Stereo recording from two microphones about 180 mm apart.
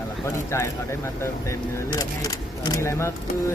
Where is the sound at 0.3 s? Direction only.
15° left (ahead or behind).